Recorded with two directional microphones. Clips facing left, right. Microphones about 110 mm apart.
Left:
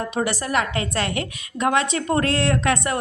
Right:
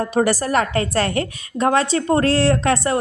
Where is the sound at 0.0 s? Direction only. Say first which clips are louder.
Right 6 dB; 40° right (ahead or behind).